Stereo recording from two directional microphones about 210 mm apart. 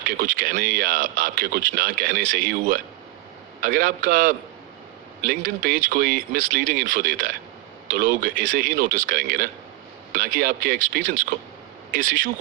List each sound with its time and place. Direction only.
0.2 s speech: 35° right (ahead or behind)